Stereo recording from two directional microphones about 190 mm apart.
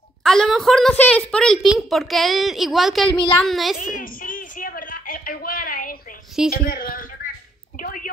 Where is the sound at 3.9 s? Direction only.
50° left (ahead or behind).